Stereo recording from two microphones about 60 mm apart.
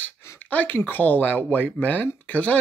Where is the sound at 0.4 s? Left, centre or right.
Left.